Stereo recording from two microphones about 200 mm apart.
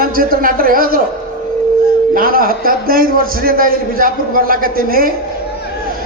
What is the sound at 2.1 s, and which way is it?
A man's voice, 45° right (ahead or behind).